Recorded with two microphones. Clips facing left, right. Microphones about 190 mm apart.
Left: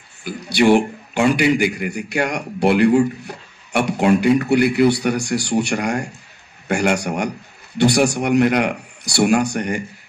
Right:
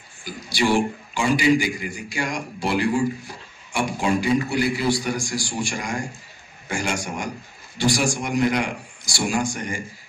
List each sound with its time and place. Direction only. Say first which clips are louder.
0.2 s a man's voice: left 7 dB; 65° left (ahead or behind)